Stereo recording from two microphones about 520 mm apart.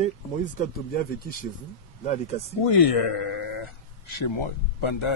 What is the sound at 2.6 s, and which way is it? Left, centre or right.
Speech, left.